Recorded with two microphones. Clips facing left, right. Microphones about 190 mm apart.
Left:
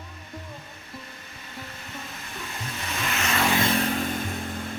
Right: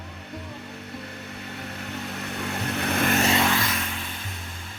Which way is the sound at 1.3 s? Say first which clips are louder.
Right 3 dB; 65° right (ahead or behind).